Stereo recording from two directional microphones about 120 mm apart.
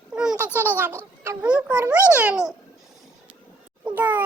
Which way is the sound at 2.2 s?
10° right (ahead or behind).